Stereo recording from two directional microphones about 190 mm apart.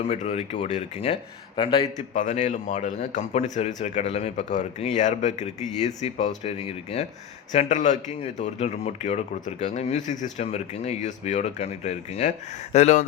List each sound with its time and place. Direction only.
0.0 s a man's voice: 35° left (ahead or behind)
2.1 s speech: 40° left (ahead or behind)